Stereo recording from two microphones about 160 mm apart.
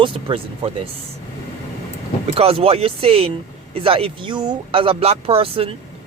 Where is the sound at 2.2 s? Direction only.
40° right (ahead or behind).